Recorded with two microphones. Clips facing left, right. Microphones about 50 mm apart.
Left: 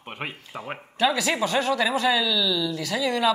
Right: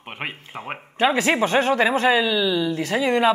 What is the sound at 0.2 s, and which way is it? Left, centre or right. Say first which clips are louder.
Speech: right 3 dB; right.